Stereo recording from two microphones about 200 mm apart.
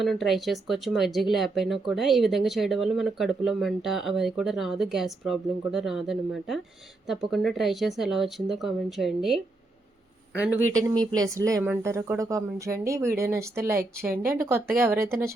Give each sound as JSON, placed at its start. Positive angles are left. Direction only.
{"t": 0.0, "sound": "speech", "side_deg": 0}
{"t": 10.4, "sound": "speech", "side_deg": -10}
{"t": 14.1, "sound": "speech", "side_deg": -45}